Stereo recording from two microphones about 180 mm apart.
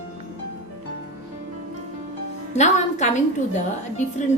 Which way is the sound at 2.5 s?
40° left (ahead or behind).